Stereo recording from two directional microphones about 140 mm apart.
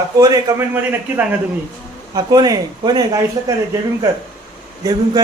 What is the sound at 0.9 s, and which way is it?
Speech, 10° right (ahead or behind).